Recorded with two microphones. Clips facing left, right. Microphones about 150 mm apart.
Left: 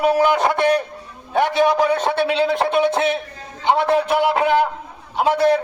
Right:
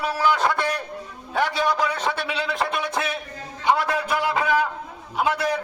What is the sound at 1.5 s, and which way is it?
Speech, 55° left (ahead or behind).